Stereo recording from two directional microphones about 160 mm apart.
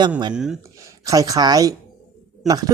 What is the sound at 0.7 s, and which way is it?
Speech, 20° right (ahead or behind).